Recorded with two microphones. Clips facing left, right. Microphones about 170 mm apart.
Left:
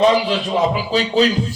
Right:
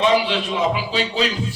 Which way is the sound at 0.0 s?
40° left (ahead or behind).